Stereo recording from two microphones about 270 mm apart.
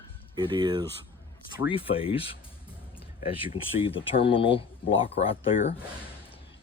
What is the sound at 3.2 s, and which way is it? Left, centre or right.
Speech, centre.